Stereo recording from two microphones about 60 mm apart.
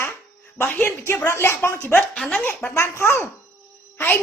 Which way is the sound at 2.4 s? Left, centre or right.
Left.